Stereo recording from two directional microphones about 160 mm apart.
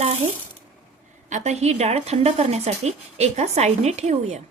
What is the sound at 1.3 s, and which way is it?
A woman's voice, 45° right (ahead or behind).